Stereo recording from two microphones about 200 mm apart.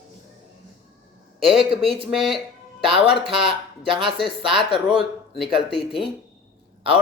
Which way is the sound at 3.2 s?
25° right (ahead or behind).